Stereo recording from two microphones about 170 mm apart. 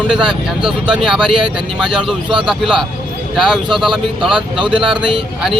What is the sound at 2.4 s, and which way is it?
Speech, centre (ahead or behind).